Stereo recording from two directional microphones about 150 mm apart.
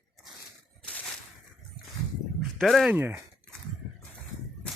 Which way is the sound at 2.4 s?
Centre (ahead or behind).